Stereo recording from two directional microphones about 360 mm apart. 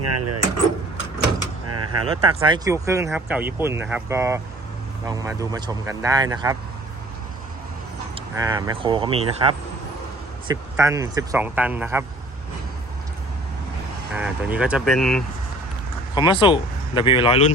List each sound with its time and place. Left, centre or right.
0.0 s speech: right
1.6 s a sound: right
2.0 s speech: centre
8.4 s speech: centre
10.5 s speech: centre
14.1 s speech: centre
16.1 s speech: centre